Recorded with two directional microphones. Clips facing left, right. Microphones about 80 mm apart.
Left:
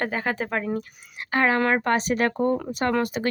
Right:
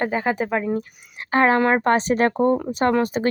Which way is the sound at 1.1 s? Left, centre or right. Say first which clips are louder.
Right 4 dB; right.